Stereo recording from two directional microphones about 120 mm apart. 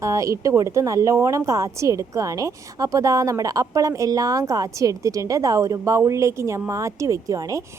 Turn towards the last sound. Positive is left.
turn(degrees=-25)  # may be behind; listen again after turning